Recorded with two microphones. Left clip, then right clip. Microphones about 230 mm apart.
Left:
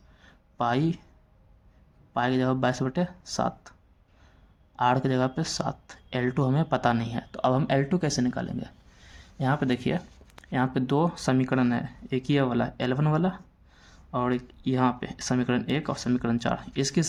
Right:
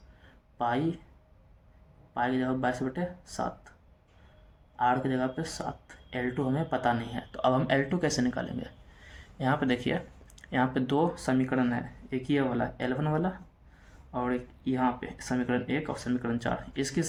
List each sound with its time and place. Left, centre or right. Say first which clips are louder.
0.6 s speech: left 3 dB; left
2.1 s speech: left 4 dB; left
4.8 s speech: left 3 dB; left